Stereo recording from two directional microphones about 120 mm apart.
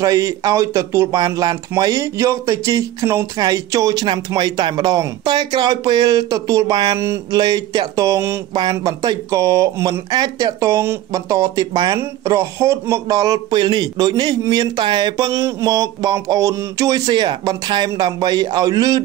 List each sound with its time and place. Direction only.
0.0 s speech: 30° right (ahead or behind)
8.5 s speech: 35° right (ahead or behind)